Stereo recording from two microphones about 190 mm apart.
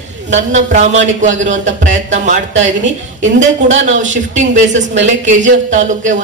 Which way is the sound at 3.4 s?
40° right (ahead or behind).